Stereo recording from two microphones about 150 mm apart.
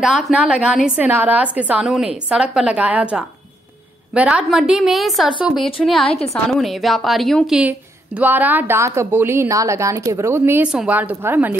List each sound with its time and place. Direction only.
0.0 s a woman's voice: 5° right (ahead or behind)
5.6 s a woman's voice: 35° left (ahead or behind)
6.3 s a woman's voice: centre (ahead or behind)